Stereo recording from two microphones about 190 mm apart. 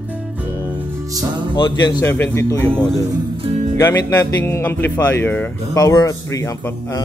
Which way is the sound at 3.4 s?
40° right (ahead or behind).